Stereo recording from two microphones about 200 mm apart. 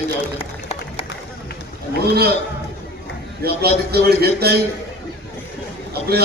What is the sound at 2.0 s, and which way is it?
Speech, 50° right (ahead or behind).